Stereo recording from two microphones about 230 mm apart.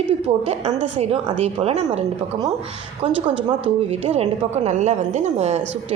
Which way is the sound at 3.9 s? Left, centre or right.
Right.